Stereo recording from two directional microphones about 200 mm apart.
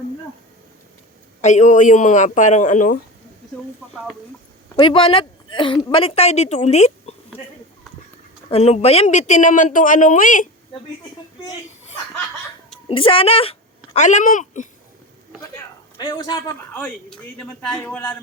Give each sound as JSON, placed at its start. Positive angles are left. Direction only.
{"t": 1.4, "sound": "speech", "side_deg": 35}
{"t": 4.8, "sound": "a woman's voice", "side_deg": 25}
{"t": 8.4, "sound": "speech", "side_deg": 30}
{"t": 12.9, "sound": "speech", "side_deg": 25}
{"t": 16.0, "sound": "a woman's voice", "side_deg": 20}
{"t": 16.7, "sound": "a man's voice", "side_deg": 5}